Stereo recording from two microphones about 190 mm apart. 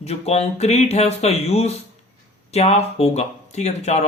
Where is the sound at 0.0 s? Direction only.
35° left (ahead or behind).